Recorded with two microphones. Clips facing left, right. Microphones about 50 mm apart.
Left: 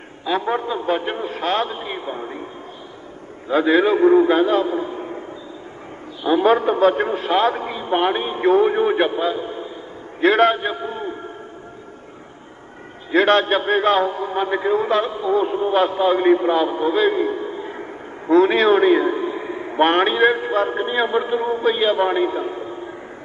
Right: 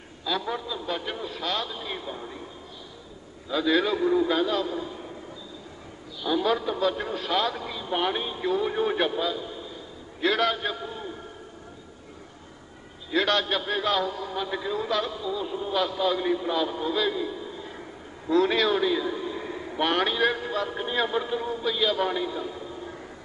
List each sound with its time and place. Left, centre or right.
0.2 s a man's voice: left
3.4 s a man's voice: left
6.2 s a man's voice: left
13.1 s a man's voice: left